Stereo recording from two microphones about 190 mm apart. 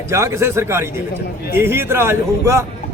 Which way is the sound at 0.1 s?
15° right (ahead or behind).